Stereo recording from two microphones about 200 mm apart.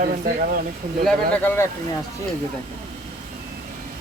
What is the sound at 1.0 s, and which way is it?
Speech, 10° left (ahead or behind).